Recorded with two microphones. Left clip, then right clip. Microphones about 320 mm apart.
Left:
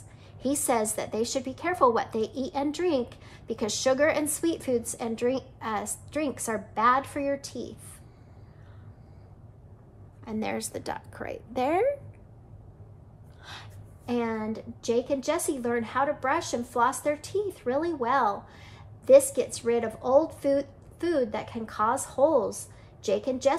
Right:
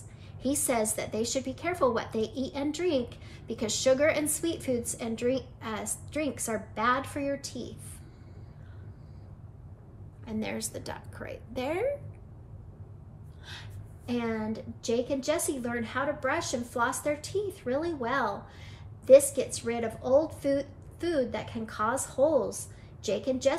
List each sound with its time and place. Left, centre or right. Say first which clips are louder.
0.4 s a woman's voice: left 2 dB; centre
10.2 s a woman's voice: left 3 dB; centre
13.5 s a woman's voice: left 1 dB; centre